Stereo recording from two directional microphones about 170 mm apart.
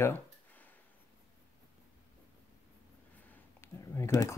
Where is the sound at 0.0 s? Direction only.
10° left (ahead or behind).